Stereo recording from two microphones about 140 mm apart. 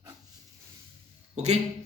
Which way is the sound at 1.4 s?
55° right (ahead or behind).